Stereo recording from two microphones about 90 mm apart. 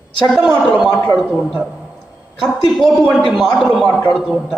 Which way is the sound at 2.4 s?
5° left (ahead or behind).